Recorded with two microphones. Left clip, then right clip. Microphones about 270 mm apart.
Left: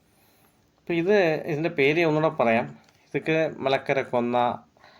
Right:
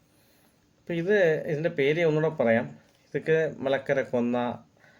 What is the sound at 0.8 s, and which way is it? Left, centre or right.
Speech, centre.